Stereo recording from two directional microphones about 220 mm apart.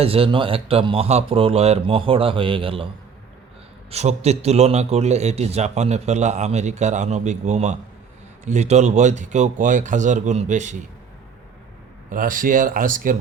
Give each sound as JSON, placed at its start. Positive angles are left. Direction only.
{"t": 0.0, "sound": "speech", "side_deg": -25}
{"t": 3.9, "sound": "a man's voice", "side_deg": -30}
{"t": 12.1, "sound": "a man's voice", "side_deg": -40}